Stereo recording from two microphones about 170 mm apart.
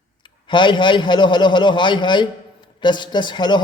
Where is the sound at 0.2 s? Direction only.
25° left (ahead or behind).